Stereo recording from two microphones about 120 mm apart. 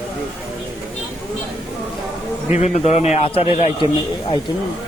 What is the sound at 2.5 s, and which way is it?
A man's voice, 70° left (ahead or behind).